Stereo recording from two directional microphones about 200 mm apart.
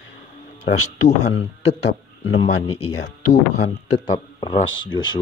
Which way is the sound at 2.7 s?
30° left (ahead or behind).